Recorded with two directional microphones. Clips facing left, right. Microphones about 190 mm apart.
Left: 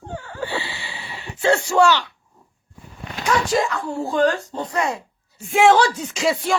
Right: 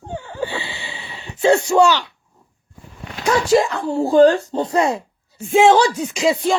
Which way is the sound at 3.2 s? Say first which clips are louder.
Right 5 dB; 25° right (ahead or behind).